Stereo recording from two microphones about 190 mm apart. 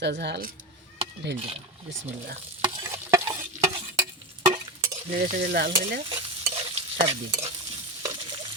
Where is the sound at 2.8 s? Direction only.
15° right (ahead or behind).